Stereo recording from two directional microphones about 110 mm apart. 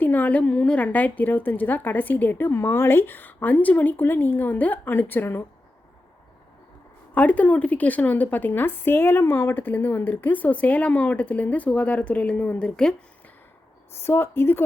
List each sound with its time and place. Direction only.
0.0 s a woman's voice: 15° left (ahead or behind)
7.1 s a woman's voice: 15° left (ahead or behind)
14.0 s speech: 20° left (ahead or behind)